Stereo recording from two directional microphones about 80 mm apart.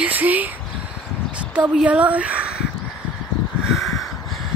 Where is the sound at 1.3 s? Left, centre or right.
Centre.